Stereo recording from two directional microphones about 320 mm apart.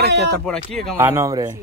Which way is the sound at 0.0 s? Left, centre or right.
Right.